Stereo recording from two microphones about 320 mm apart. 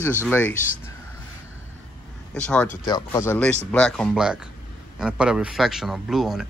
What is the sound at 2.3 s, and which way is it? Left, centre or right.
Speech, centre.